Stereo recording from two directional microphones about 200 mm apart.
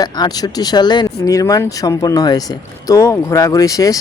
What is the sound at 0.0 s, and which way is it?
Speech, 20° left (ahead or behind).